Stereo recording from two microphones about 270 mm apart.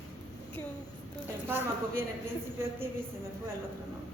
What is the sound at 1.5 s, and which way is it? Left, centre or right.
Speech, centre.